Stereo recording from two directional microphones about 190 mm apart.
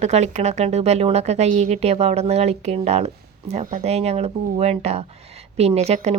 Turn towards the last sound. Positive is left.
turn(degrees=-35)  # may be behind; listen again after turning